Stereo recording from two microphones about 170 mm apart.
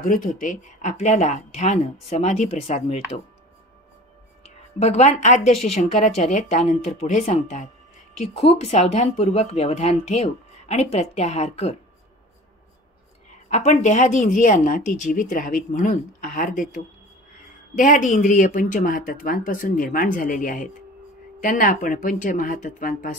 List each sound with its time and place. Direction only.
0.0 s speech: 50° left (ahead or behind)
4.7 s speech: 40° left (ahead or behind)
13.5 s speech: 45° left (ahead or behind)
17.7 s speech: 50° left (ahead or behind)